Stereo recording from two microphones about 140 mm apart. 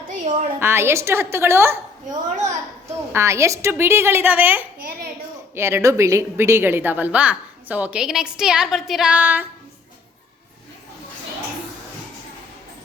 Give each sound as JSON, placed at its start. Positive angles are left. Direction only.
{"t": 0.1, "sound": "a sound", "side_deg": -60}
{"t": 0.6, "sound": "a woman's voice", "side_deg": -15}
{"t": 3.1, "sound": "a woman's voice", "side_deg": -20}